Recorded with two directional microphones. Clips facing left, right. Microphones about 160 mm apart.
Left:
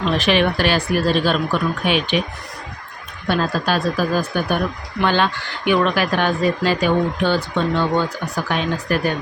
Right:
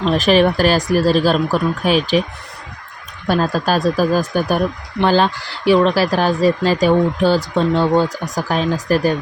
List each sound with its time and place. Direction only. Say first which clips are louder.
0.0 s speech: right 4 dB; 40° right (ahead or behind)
3.2 s speech: right 3 dB; 40° right (ahead or behind)